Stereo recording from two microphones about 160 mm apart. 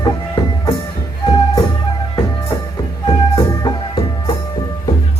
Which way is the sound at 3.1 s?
25° left (ahead or behind).